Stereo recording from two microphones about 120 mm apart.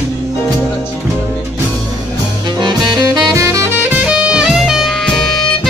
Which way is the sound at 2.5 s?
40° right (ahead or behind).